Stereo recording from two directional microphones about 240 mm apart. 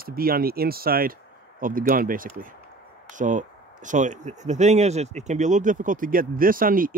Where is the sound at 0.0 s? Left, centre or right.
Right.